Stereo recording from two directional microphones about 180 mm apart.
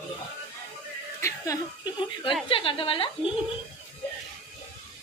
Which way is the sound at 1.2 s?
15° left (ahead or behind).